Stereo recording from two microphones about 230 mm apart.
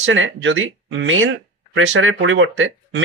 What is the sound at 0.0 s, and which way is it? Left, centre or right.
Speech, right.